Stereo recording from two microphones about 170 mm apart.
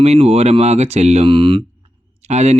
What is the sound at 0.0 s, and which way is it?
Speech, 40° right (ahead or behind).